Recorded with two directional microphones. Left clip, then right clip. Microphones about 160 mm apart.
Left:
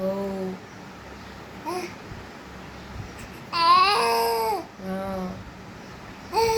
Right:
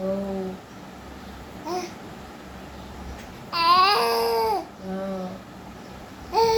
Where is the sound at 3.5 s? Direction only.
5° left (ahead or behind).